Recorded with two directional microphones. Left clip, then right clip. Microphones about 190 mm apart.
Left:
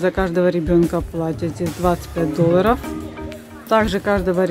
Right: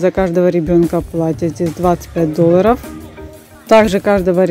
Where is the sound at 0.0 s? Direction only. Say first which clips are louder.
Right 5 dB; 25° right (ahead or behind).